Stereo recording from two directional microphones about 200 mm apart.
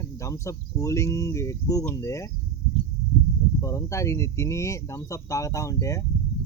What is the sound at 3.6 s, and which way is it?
Speech, 15° left (ahead or behind).